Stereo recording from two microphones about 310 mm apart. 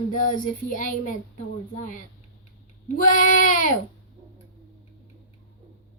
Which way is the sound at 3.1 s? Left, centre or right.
Left.